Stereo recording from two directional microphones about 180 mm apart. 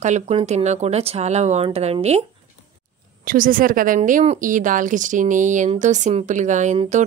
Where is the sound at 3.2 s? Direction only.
50° right (ahead or behind).